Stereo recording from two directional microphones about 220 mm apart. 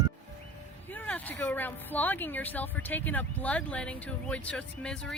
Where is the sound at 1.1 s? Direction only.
10° left (ahead or behind).